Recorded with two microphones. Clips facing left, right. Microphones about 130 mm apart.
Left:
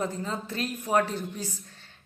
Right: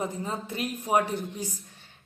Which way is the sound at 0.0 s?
15° right (ahead or behind).